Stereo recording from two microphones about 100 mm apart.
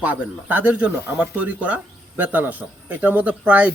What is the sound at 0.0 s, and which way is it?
Speech, 15° right (ahead or behind).